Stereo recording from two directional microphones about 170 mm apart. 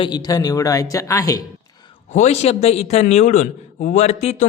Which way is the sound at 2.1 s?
40° left (ahead or behind).